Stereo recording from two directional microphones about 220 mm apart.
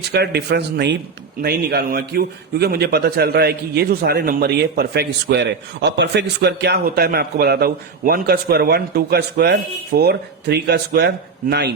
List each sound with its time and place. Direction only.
0.1 s a man's voice: 50° right (ahead or behind)